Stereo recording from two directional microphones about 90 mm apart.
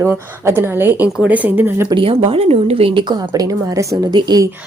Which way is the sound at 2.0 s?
90° right.